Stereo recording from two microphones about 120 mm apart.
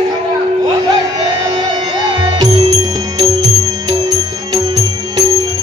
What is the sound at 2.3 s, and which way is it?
Music, 35° right (ahead or behind).